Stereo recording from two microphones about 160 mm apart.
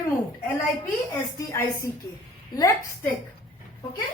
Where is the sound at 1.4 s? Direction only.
20° left (ahead or behind).